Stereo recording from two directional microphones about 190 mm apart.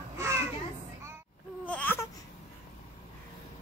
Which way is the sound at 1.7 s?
10° left (ahead or behind).